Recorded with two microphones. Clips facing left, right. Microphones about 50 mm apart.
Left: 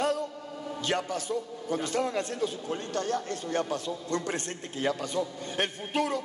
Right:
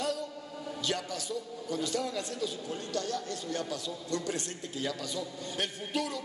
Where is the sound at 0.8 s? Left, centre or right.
Left.